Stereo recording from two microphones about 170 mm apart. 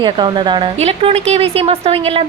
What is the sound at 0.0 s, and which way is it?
Speech, 25° right (ahead or behind).